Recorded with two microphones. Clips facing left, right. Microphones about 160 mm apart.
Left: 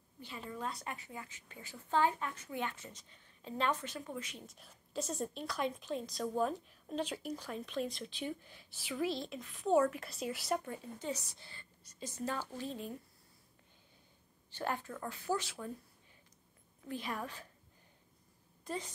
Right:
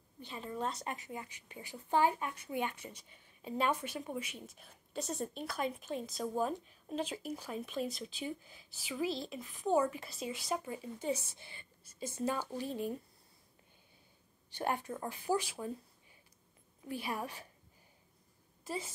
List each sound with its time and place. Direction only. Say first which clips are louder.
0.2 s a woman's voice: right 3 dB; 20° right (ahead or behind)
11.1 s a woman's voice: right 2 dB; 20° right (ahead or behind)
14.5 s speech: right 3 dB; 15° right (ahead or behind)
16.8 s speech: right 1 dB; 10° right (ahead or behind)
18.6 s a sound: right 1 dB; 5° right (ahead or behind)